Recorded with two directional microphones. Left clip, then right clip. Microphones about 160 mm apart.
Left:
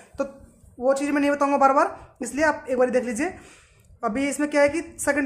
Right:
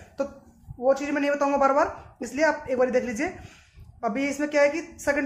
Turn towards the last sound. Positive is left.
turn(degrees=30)  # may be behind; listen again after turning